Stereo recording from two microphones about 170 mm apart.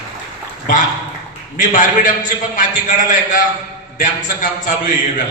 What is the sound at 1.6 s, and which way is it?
A man's voice, 55° left (ahead or behind).